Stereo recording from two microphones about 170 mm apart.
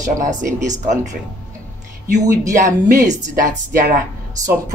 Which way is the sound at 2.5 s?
50° right (ahead or behind).